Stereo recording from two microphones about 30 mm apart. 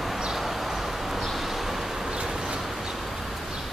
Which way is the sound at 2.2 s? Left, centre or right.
Centre.